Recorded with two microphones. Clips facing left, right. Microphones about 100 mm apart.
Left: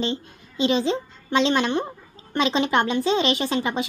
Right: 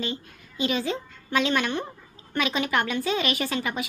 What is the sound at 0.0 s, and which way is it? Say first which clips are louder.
A woman's voice: left 5 dB; 25° left (ahead or behind).